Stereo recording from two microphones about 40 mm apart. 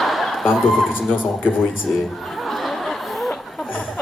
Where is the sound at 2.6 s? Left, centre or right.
Centre.